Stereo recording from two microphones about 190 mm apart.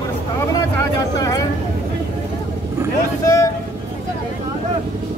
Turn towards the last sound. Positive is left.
turn(degrees=15)  # may be behind; listen again after turning